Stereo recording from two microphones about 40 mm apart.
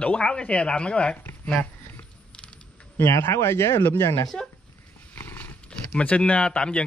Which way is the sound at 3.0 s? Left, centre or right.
Left.